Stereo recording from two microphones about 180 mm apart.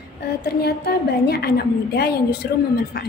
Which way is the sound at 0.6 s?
60° left (ahead or behind).